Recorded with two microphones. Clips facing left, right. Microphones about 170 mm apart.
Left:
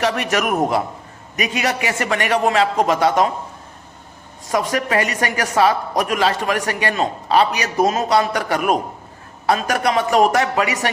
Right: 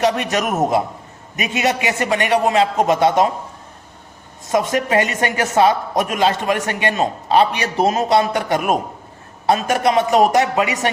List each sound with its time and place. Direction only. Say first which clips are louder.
0.0 s a man's voice: right 1 dB; 20° right (ahead or behind)
4.7 s a man's voice: right 2 dB; 25° right (ahead or behind)